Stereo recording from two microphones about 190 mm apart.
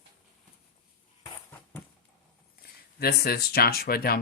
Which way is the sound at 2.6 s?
55° left (ahead or behind).